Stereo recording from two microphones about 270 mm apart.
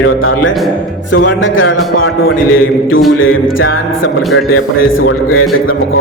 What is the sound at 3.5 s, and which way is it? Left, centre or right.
Music, left.